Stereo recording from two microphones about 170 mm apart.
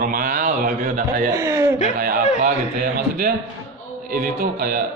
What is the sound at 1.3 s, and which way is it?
Speech, 15° right (ahead or behind).